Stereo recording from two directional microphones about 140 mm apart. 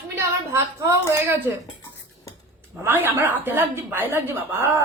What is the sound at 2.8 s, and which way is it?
A woman's voice, 15° right (ahead or behind).